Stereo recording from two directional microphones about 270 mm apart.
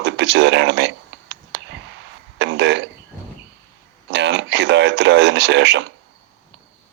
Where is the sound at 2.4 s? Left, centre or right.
Right.